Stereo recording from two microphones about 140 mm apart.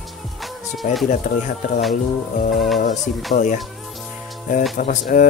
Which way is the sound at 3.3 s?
60° left (ahead or behind).